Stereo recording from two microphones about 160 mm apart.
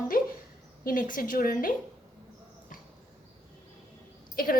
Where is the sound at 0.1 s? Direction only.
60° left (ahead or behind).